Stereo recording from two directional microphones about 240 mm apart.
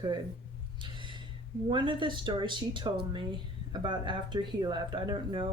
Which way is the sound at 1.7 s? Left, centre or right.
Centre.